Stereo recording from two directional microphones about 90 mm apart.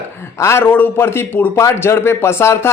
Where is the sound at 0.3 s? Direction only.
30° left (ahead or behind).